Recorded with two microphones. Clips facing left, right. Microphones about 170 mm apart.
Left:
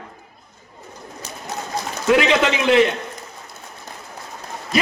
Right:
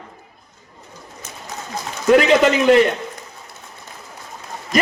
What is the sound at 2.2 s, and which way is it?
Speech, 45° right (ahead or behind).